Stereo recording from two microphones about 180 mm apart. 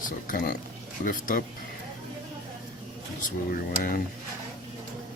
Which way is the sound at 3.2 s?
50° left (ahead or behind).